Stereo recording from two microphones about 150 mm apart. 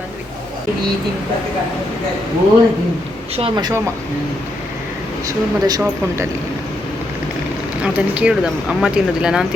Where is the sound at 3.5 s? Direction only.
25° right (ahead or behind).